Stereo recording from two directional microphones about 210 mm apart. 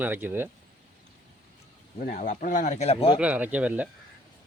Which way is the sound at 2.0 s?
40° left (ahead or behind).